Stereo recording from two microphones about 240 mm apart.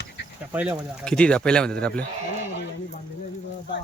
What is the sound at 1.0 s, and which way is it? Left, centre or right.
Speech, centre.